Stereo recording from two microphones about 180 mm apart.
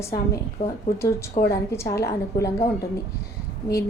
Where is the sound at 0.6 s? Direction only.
35° left (ahead or behind).